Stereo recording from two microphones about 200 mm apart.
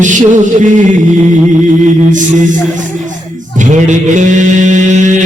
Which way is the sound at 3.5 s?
40° right (ahead or behind).